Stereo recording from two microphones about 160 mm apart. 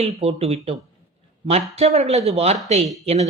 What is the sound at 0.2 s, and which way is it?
Speech, 40° right (ahead or behind).